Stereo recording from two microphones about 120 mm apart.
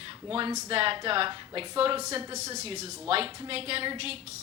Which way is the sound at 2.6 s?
60° right (ahead or behind).